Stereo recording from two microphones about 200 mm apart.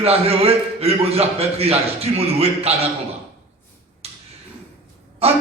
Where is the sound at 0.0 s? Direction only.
30° right (ahead or behind).